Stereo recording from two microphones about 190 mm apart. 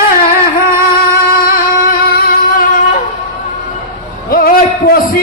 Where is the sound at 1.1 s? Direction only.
50° left (ahead or behind).